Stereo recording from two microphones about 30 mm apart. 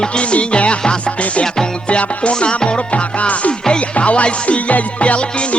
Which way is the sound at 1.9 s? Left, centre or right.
Left.